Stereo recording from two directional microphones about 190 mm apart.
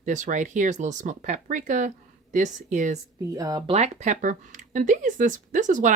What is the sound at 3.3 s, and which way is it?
Speech, 20° right (ahead or behind).